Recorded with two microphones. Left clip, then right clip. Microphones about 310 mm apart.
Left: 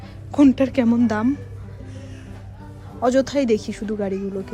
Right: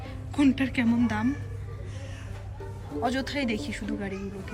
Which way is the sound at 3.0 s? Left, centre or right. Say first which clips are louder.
Left 11 dB; centre.